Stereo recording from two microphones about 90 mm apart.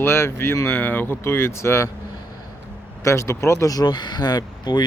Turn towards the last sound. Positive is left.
turn(degrees=50)  # may be behind; listen again after turning